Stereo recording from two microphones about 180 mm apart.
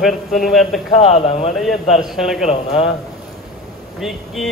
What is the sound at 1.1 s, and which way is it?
Speech, 35° left (ahead or behind).